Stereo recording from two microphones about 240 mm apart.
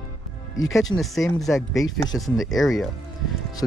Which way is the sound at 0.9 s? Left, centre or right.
Centre.